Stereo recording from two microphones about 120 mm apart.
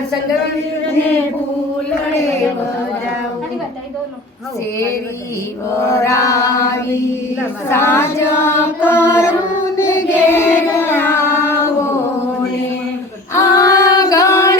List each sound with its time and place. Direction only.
5.7 s chant: 25° left (ahead or behind)
9.7 s carnatic music: 20° left (ahead or behind)
13.3 s female singing: 25° left (ahead or behind)